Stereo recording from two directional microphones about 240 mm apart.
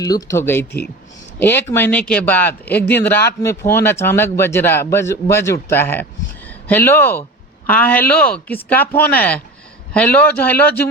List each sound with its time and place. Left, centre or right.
0.0 s a man's voice: centre